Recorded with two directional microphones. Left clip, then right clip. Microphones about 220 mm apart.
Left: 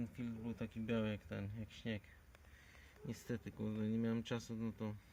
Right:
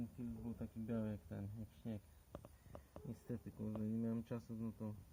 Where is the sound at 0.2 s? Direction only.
35° left (ahead or behind).